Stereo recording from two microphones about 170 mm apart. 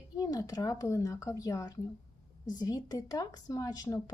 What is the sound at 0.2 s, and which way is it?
A woman's voice, 20° left (ahead or behind).